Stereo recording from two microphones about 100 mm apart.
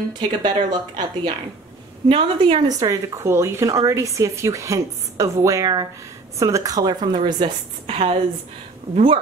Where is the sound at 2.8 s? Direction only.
30° right (ahead or behind).